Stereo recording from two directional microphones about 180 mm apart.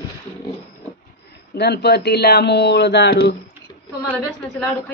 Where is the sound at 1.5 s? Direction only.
65° left (ahead or behind).